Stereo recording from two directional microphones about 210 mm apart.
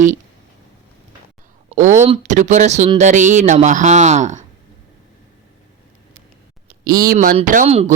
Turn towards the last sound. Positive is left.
turn(degrees=-35)  # may be behind; listen again after turning